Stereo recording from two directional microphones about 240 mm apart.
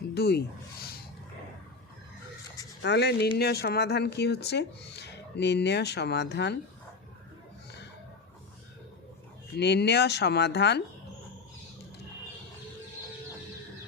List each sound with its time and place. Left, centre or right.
0.1 s speech: left
2.8 s speech: left
9.6 s speech: left